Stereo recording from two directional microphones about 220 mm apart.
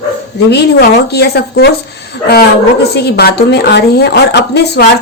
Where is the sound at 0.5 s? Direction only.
50° left (ahead or behind).